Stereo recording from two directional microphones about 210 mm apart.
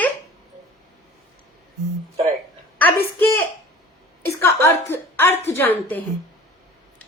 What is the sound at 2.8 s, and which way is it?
A woman's voice, 10° left (ahead or behind).